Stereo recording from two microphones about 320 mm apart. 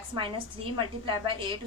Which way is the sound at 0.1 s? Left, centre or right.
Centre.